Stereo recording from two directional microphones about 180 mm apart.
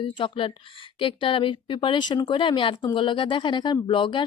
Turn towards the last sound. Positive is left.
turn(degrees=25)  # may be behind; listen again after turning